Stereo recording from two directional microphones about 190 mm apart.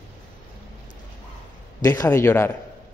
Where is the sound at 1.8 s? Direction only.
20° left (ahead or behind).